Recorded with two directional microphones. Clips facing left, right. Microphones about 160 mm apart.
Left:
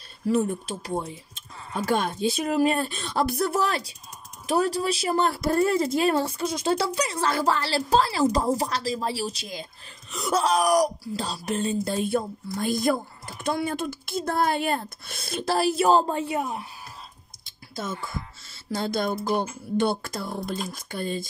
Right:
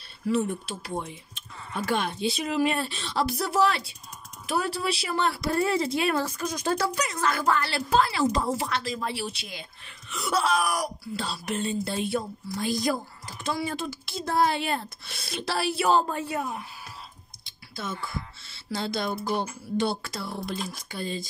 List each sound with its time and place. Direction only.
0.3 s speech: 40° left (ahead or behind)
16.1 s speech: 20° left (ahead or behind)
17.5 s speech: 45° left (ahead or behind)